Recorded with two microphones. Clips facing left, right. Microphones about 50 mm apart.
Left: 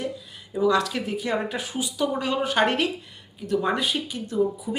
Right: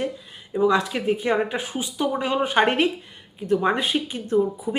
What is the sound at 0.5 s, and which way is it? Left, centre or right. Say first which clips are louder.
Speech: right 2 dB; right.